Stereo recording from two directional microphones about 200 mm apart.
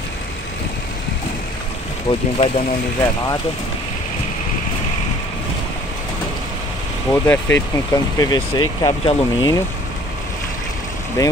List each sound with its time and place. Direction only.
2.0 s speech: 30° left (ahead or behind)
7.1 s speech: 10° left (ahead or behind)
11.2 s speech: 15° left (ahead or behind)